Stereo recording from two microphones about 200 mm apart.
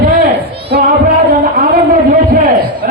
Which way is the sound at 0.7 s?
50° right (ahead or behind).